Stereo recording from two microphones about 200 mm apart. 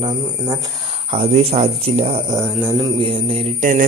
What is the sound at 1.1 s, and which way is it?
Speech, 30° right (ahead or behind).